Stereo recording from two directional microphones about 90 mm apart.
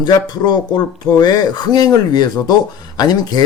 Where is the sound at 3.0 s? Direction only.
45° left (ahead or behind).